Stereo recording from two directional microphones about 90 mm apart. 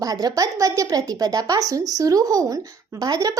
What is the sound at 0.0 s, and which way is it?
A woman's voice, 45° right (ahead or behind).